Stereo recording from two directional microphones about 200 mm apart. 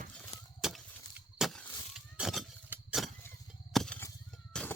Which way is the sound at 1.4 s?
Centre (ahead or behind).